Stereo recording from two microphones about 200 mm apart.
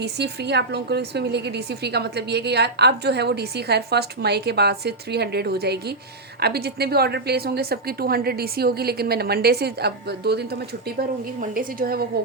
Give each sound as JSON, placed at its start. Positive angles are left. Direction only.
{"t": 0.0, "sound": "a woman's voice", "side_deg": -55}